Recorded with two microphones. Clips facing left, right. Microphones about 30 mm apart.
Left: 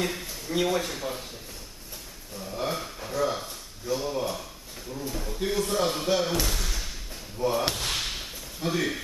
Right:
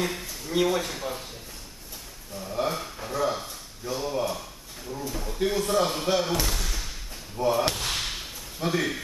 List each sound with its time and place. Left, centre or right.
0.0 s a man's voice: centre
2.3 s a sound: centre
5.1 s speech: centre
7.4 s whip: centre
8.5 s speech: centre